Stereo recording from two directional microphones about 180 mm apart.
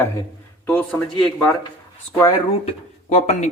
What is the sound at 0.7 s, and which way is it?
Speech, 5° left (ahead or behind).